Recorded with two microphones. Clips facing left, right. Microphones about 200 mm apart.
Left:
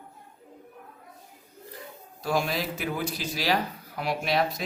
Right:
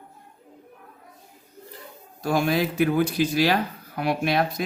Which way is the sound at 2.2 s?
50° right (ahead or behind).